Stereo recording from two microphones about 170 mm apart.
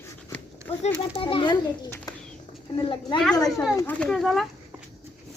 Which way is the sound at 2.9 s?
30° left (ahead or behind).